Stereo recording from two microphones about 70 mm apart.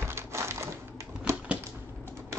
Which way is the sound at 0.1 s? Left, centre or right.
Right.